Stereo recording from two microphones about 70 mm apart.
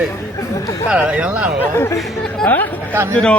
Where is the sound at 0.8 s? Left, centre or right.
Centre.